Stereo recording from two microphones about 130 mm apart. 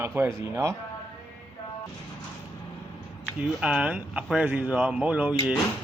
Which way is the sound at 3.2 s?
10° right (ahead or behind).